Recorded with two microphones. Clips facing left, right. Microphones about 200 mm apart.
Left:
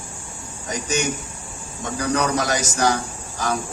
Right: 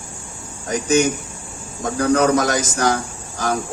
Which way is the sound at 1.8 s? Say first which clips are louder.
Right 6 dB; 45° right (ahead or behind).